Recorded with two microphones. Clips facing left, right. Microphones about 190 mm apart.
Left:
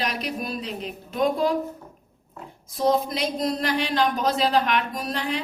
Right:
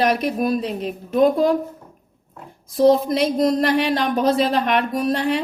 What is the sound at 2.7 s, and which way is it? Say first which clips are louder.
A woman's voice: right 7 dB; 55° right (ahead or behind).